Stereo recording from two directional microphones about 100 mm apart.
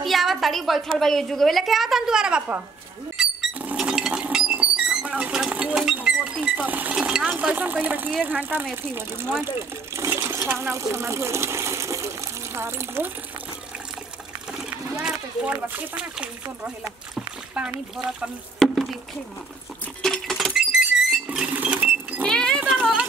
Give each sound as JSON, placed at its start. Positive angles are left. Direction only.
{"t": 0.0, "sound": "a woman's voice", "side_deg": 0}
{"t": 3.2, "sound": "a sound", "side_deg": -5}
{"t": 3.7, "sound": "sewing machine", "side_deg": -5}
{"t": 5.5, "sound": "a sound", "side_deg": -15}
{"t": 6.4, "sound": "speech", "side_deg": -15}
{"t": 14.5, "sound": "a sound", "side_deg": -5}
{"t": 15.7, "sound": "speech", "side_deg": -15}
{"t": 20.0, "sound": "rodents", "side_deg": 5}
{"t": 21.5, "sound": "sewing machine", "side_deg": -15}
{"t": 22.2, "sound": "goat", "side_deg": 5}